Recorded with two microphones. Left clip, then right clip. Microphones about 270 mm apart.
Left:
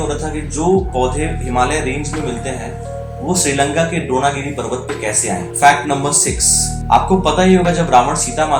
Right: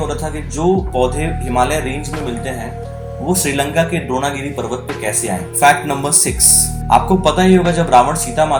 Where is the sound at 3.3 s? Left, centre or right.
Right.